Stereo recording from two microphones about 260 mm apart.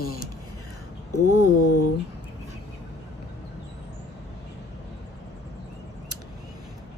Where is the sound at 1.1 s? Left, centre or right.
Left.